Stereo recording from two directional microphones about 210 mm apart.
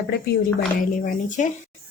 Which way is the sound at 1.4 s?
35° left (ahead or behind).